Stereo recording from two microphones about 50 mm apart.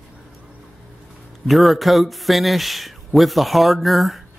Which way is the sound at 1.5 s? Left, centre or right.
Centre.